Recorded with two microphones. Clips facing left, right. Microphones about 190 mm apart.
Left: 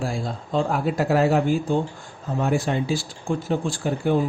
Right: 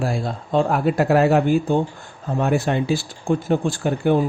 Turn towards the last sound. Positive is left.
turn(degrees=-60)  # may be behind; listen again after turning